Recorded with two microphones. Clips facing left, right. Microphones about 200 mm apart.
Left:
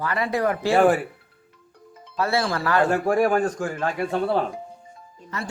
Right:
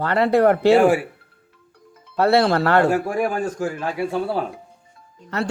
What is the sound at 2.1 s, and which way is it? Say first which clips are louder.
Speech: right 7 dB; 65° right (ahead or behind).